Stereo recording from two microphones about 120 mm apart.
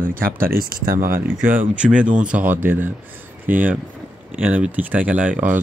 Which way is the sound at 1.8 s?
10° right (ahead or behind).